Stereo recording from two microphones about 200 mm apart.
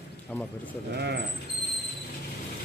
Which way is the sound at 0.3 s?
10° left (ahead or behind).